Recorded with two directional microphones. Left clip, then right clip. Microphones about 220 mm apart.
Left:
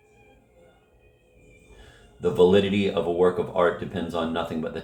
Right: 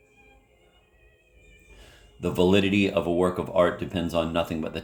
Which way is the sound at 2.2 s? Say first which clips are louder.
Left 4 dB; 50° right (ahead or behind).